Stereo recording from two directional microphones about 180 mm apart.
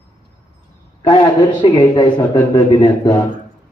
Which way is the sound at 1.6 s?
25° left (ahead or behind).